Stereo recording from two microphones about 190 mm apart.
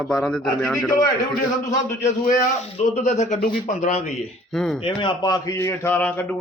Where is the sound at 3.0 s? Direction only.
40° left (ahead or behind).